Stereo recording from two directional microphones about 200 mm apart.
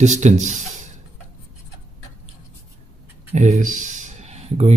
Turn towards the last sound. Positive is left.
turn(degrees=-35)  # may be behind; listen again after turning